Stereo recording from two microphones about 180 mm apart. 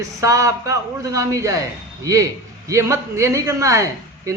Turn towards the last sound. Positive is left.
turn(degrees=-15)  # may be behind; listen again after turning